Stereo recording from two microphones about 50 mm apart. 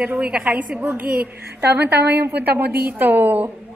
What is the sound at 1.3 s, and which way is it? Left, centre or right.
A woman's voice, right.